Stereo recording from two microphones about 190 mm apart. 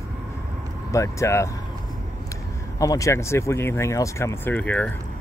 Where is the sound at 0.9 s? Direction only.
15° left (ahead or behind).